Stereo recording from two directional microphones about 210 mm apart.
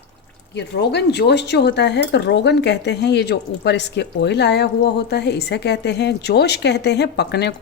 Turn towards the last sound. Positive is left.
turn(degrees=55)  # may be behind; listen again after turning